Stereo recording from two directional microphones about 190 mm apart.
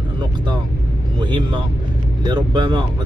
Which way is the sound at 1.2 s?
25° right (ahead or behind).